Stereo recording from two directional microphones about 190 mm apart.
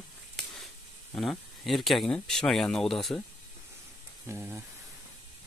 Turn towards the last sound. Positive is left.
turn(degrees=-10)  # may be behind; listen again after turning